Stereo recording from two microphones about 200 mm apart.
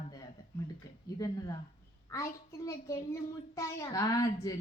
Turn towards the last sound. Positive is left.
turn(degrees=15)  # may be behind; listen again after turning